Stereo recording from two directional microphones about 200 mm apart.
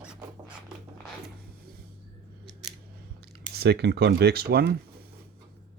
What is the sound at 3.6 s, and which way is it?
Speech, 55° right (ahead or behind).